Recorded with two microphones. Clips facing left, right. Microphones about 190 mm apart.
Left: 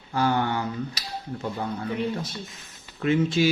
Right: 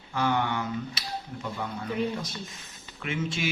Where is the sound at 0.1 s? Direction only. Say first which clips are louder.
Left 3 dB; 35° left (ahead or behind).